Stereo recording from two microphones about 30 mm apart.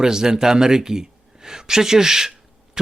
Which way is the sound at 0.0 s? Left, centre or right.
Right.